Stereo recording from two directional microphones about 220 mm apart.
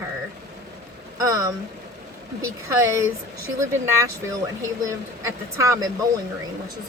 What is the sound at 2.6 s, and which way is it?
Speech, 10° right (ahead or behind).